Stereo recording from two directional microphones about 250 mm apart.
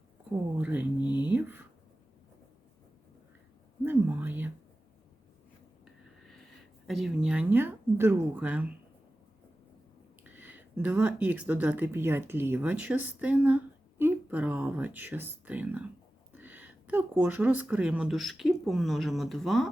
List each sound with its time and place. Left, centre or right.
0.6 s speech: centre
1.0 s speech: centre
1.3 s speech: centre
3.8 s a sound: centre
6.8 s speech: centre
10.2 s speech: centre